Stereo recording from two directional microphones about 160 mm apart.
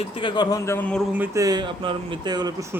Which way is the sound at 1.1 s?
15° right (ahead or behind).